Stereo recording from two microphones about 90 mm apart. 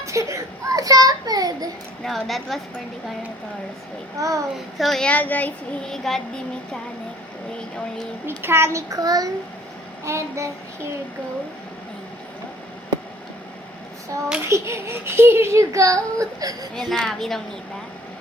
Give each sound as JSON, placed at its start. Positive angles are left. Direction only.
{"t": 0.0, "sound": "a child's voice", "side_deg": -35}
{"t": 2.0, "sound": "a woman's voice", "side_deg": 0}
{"t": 4.2, "sound": "a child's voice", "side_deg": -40}
{"t": 4.5, "sound": "a woman's voice", "side_deg": 0}
{"t": 5.0, "sound": "a child's voice", "side_deg": 15}
{"t": 5.8, "sound": "a woman's voice", "side_deg": 5}
{"t": 8.4, "sound": "a child's voice", "side_deg": -25}
{"t": 10.0, "sound": "a child's voice", "side_deg": -35}
{"t": 14.4, "sound": "a child's voice", "side_deg": -30}
{"t": 16.7, "sound": "a woman's voice", "side_deg": 5}